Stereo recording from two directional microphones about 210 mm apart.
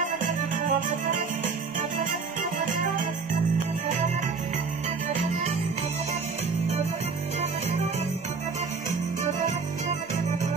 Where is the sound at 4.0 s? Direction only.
35° right (ahead or behind).